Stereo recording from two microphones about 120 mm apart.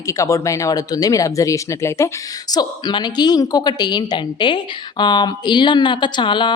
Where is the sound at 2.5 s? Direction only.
35° left (ahead or behind).